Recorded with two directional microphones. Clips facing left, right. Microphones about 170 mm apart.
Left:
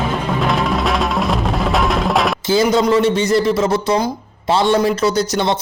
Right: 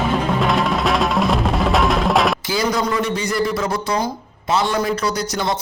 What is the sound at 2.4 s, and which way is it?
Speech, 25° left (ahead or behind).